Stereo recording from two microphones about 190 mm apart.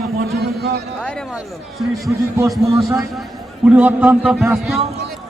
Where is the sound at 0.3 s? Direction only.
55° right (ahead or behind).